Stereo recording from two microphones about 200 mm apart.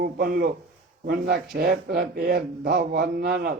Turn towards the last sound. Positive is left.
turn(degrees=-45)  # may be behind; listen again after turning